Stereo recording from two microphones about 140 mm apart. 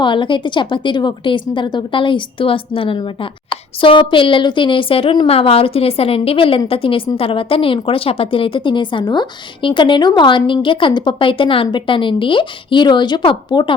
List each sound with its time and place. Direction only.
0.0 s a woman's voice: 35° left (ahead or behind)